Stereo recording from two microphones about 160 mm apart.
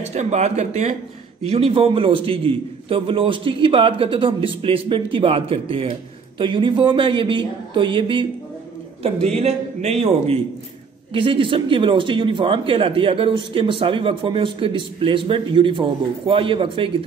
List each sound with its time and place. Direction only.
0.1 s a man's voice: 45° right (ahead or behind)
9.4 s a man's voice: 45° right (ahead or behind)